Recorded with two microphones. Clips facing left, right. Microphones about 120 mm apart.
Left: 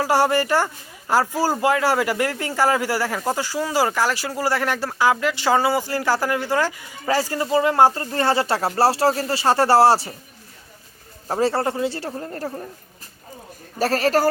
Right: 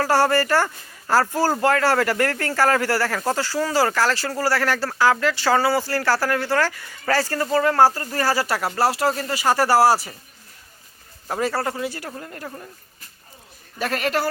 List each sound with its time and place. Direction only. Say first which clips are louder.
0.0 s speech: even; 15° left (ahead or behind)
11.3 s a man's voice: left 3 dB; 30° left (ahead or behind)
13.7 s a man's voice: left 4 dB; 35° left (ahead or behind)